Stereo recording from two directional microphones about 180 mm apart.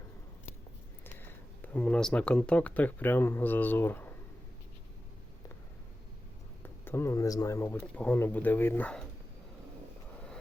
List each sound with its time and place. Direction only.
1.0 s speech: 10° left (ahead or behind)
6.6 s speech: 15° left (ahead or behind)